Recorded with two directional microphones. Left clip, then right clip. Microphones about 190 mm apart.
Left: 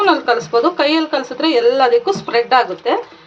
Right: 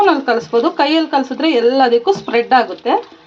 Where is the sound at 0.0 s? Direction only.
40° right (ahead or behind).